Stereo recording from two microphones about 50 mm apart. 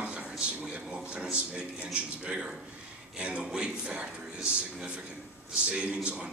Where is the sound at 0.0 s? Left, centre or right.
Right.